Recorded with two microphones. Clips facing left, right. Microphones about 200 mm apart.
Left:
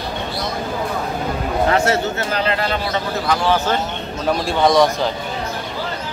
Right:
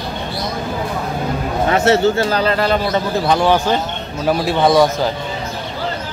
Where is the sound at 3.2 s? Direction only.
20° right (ahead or behind).